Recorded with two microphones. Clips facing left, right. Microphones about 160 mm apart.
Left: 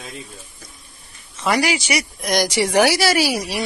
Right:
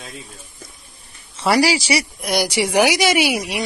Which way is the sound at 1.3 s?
30° right (ahead or behind).